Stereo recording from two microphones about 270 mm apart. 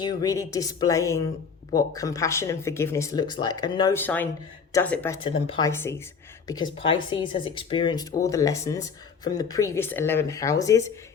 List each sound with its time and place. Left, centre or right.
0.0 s speech: centre